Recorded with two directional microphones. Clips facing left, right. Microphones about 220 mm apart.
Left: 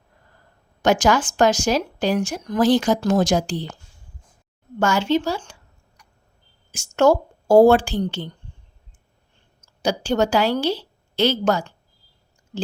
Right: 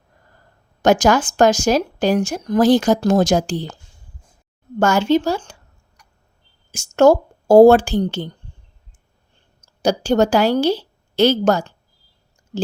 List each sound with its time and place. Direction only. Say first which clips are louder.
0.8 s speech: right 3 dB; 40° right (ahead or behind)
4.8 s speech: right 4 dB; 45° right (ahead or behind)
6.0 s tick: right 1 dB; 40° right (ahead or behind)
6.7 s speech: right 4 dB; 45° right (ahead or behind)
9.8 s a woman's voice: right 4 dB; 45° right (ahead or behind)